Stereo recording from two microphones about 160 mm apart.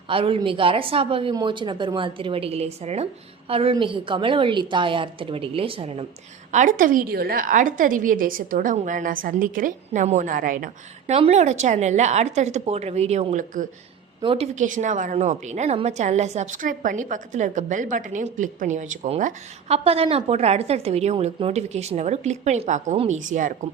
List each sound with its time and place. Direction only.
0.1 s a woman's voice: 35° right (ahead or behind)
6.5 s a woman's voice: 50° right (ahead or behind)
11.0 s a woman's voice: 40° right (ahead or behind)
14.2 s a woman's voice: 35° right (ahead or behind); by 23.6 s 55° right (ahead or behind)